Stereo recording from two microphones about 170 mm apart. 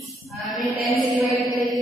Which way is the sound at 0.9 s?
45° right (ahead or behind).